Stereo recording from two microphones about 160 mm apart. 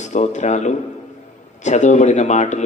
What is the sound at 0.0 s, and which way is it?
Speech, 45° left (ahead or behind).